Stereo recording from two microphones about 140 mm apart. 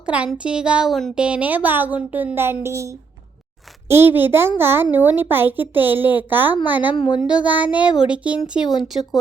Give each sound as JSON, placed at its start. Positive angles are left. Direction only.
{"t": 0.0, "sound": "a woman's voice", "side_deg": -10}